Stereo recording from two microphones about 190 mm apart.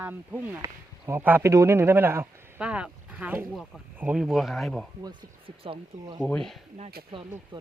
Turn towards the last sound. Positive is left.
turn(degrees=5)  # may be behind; listen again after turning